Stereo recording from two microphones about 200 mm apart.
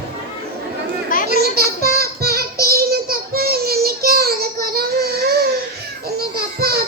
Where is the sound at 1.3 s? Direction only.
50° right (ahead or behind).